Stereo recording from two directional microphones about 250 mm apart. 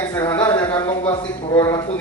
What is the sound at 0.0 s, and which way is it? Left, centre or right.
Speech, centre.